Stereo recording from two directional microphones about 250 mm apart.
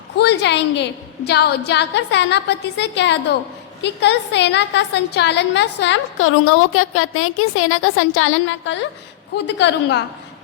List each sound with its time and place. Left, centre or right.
0.2 s a woman's voice: left